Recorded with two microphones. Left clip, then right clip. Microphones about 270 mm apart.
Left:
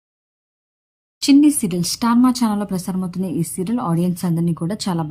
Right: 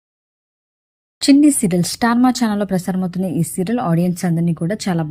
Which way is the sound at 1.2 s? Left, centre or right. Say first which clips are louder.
Right 1 dB; centre.